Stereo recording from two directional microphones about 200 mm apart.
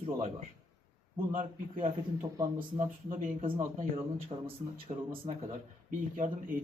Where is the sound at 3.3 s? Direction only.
25° right (ahead or behind).